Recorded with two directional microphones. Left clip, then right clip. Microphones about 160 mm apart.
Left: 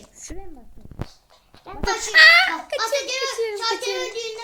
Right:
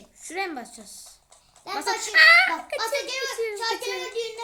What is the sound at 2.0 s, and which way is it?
Speech, centre (ahead or behind).